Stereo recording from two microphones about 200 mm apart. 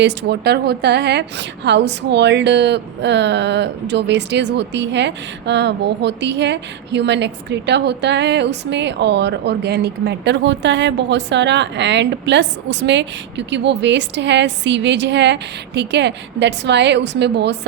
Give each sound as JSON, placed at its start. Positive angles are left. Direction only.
{"t": 0.0, "sound": "a woman's voice", "side_deg": -55}